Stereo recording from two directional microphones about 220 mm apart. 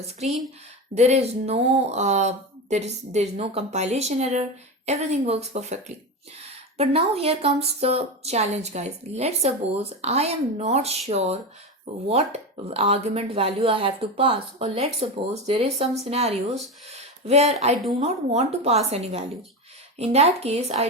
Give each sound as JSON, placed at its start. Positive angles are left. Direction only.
{"t": 0.3, "sound": "a woman's voice", "side_deg": 0}
{"t": 0.9, "sound": "speech", "side_deg": -30}
{"t": 6.7, "sound": "speech", "side_deg": -25}
{"t": 12.0, "sound": "speech", "side_deg": -30}